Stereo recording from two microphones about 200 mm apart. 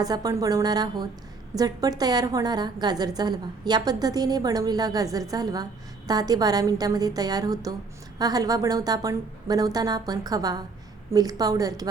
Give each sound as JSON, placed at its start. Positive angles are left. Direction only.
{"t": 0.0, "sound": "a woman's voice", "side_deg": -20}